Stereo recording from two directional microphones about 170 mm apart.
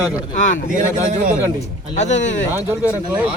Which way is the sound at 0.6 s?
50° right (ahead or behind).